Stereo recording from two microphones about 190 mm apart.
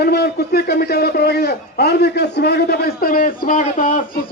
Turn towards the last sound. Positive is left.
turn(degrees=45)  # may be behind; listen again after turning